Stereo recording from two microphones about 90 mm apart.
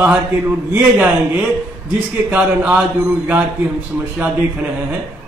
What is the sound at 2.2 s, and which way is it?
Speech, 20° right (ahead or behind).